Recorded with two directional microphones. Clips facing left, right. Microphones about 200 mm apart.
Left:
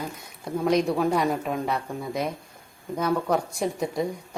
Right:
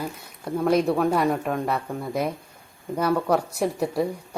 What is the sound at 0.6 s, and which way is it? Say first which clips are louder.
Speech: right 2 dB; 5° right (ahead or behind).